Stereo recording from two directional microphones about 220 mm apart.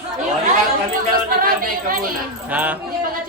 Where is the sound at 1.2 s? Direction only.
40° right (ahead or behind).